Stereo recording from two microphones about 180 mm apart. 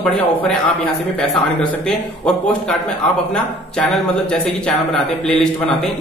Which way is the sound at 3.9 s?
Centre (ahead or behind).